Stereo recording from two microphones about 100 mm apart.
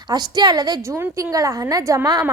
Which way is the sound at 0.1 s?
40° right (ahead or behind).